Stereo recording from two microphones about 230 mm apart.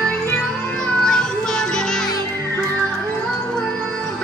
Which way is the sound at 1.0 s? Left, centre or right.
Centre.